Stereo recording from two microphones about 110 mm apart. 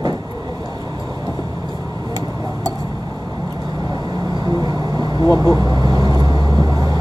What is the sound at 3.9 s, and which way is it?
Vehicle, 40° right (ahead or behind).